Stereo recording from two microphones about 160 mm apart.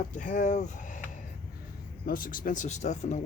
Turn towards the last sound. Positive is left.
turn(degrees=45)  # may be behind; listen again after turning